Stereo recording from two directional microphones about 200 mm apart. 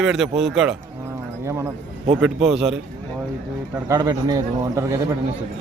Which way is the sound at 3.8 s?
20° right (ahead or behind).